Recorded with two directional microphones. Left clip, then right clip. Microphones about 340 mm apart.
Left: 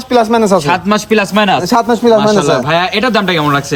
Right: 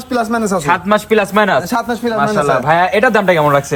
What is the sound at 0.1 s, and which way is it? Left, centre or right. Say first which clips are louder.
Speech: left 7 dB; centre.